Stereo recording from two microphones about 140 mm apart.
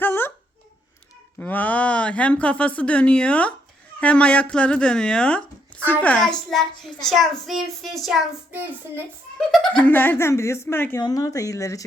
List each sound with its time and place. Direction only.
0.0 s a sound: 15° left (ahead or behind)
1.4 s a child's voice: 10° left (ahead or behind)
9.8 s speech: 15° left (ahead or behind)
11.0 s speech: 25° left (ahead or behind)